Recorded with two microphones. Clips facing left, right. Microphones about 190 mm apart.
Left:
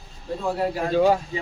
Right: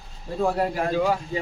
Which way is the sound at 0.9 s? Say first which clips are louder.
Left 6 dB; 30° left (ahead or behind).